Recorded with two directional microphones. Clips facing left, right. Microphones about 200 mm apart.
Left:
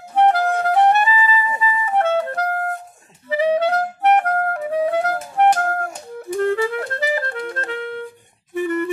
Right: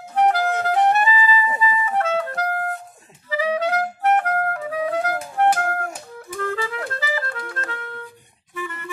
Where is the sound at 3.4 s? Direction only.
30° left (ahead or behind).